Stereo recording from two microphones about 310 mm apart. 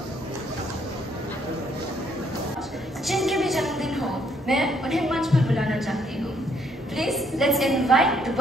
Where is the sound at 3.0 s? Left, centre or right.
Centre.